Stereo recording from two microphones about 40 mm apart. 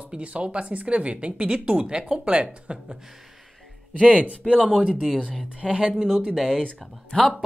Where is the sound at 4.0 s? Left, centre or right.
Right.